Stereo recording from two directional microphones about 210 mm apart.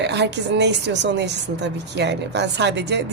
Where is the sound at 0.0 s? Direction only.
55° right (ahead or behind).